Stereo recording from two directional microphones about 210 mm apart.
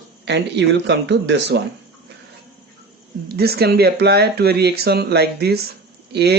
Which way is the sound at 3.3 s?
50° right (ahead or behind).